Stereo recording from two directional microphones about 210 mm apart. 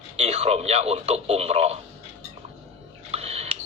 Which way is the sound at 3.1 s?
30° right (ahead or behind).